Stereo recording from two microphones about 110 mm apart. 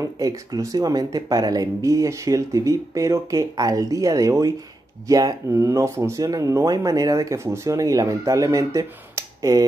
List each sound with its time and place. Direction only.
0.0 s speech: 30° right (ahead or behind)